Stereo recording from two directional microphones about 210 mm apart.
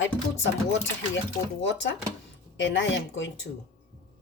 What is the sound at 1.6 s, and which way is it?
A woman's voice, 60° left (ahead or behind).